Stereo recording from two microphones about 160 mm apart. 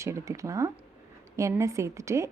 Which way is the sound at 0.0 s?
20° right (ahead or behind).